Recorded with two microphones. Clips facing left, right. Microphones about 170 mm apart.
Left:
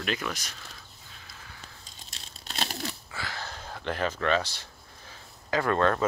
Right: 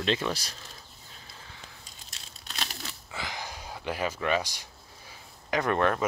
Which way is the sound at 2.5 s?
40° left (ahead or behind).